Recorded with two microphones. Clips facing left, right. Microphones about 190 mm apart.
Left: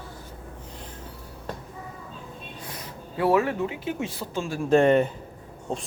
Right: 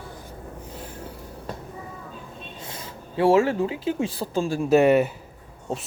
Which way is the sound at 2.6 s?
25° right (ahead or behind).